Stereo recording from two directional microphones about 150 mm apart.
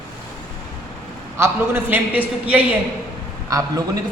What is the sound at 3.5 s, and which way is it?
Speech, 25° right (ahead or behind).